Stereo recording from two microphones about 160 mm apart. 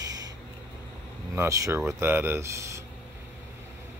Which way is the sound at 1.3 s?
20° right (ahead or behind).